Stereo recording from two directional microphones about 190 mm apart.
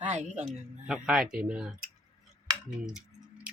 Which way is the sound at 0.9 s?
Centre (ahead or behind).